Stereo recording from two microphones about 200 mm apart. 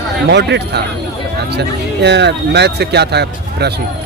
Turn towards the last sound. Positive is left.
turn(degrees=-55)  # may be behind; listen again after turning